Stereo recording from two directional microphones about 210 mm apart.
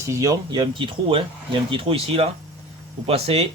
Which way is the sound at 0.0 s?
15° right (ahead or behind).